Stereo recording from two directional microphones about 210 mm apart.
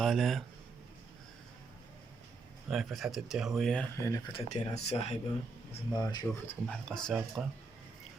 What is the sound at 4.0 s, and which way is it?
Speech, 15° left (ahead or behind).